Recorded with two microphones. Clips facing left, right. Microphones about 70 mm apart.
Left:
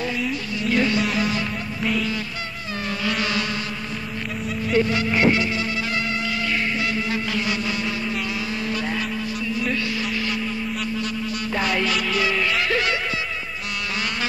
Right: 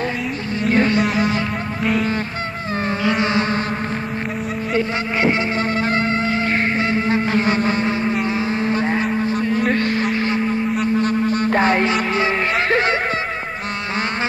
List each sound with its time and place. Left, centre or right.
0.7 s vehicle: right
3.0 s insect: right
5.1 s music: right
10.7 s a sound: right